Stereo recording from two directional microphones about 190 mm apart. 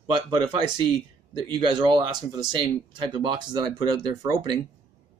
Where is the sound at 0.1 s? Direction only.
25° right (ahead or behind).